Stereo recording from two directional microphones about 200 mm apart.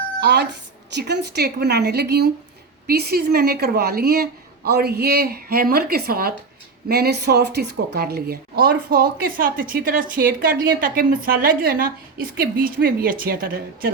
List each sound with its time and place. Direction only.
0.2 s a woman's voice: 60° right (ahead or behind)